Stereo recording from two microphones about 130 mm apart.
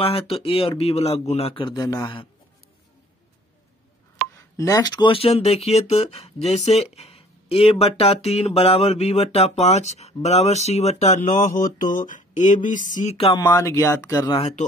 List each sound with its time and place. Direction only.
0.0 s speech: 45° left (ahead or behind); by 2.1 s 30° left (ahead or behind)
4.4 s speech: 25° left (ahead or behind); by 13.4 s 50° left (ahead or behind)
13.4 s speech: 30° left (ahead or behind)
13.7 s speech: 20° left (ahead or behind)